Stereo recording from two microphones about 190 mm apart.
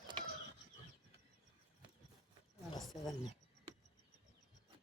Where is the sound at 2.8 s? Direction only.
Centre (ahead or behind).